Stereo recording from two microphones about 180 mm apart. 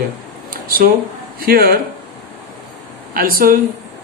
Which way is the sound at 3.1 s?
55° right (ahead or behind).